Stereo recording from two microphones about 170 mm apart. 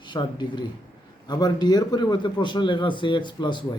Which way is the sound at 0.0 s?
25° left (ahead or behind).